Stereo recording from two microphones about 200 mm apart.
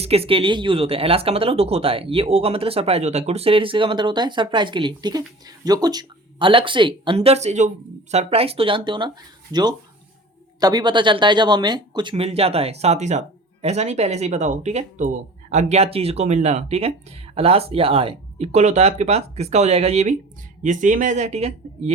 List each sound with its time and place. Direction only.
0.0 s speech: 30° right (ahead or behind)